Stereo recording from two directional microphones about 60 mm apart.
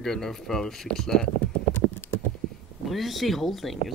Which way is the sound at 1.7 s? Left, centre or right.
Left.